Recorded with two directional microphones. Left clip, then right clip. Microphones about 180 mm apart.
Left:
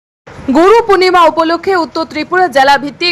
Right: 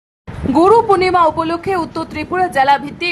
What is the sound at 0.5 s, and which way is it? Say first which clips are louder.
A woman's voice: left 3 dB; 20° left (ahead or behind).